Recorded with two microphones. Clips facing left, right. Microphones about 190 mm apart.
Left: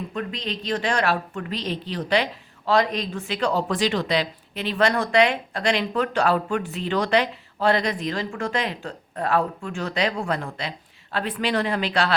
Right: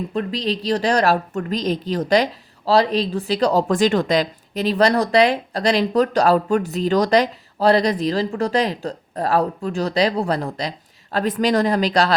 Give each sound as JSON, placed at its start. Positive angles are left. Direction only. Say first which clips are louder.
{"t": 0.1, "sound": "a woman's voice", "louder": "right 7 dB", "side_deg": -35}